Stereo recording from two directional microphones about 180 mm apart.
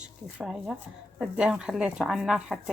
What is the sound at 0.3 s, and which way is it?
A woman's voice, 5° right (ahead or behind).